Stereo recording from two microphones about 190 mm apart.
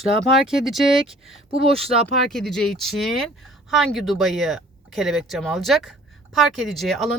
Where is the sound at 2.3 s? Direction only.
Centre (ahead or behind).